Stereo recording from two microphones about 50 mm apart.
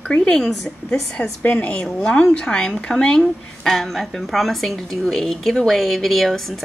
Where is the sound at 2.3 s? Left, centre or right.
Centre.